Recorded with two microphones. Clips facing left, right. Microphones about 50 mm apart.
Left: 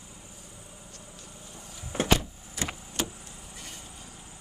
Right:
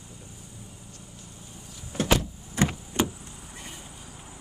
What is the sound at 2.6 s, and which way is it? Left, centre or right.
Vehicle, right.